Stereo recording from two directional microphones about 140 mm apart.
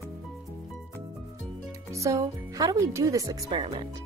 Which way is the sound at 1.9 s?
20° right (ahead or behind).